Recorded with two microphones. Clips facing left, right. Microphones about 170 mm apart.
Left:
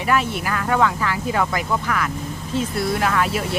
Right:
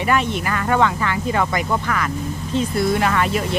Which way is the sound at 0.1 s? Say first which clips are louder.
Even; centre (ahead or behind).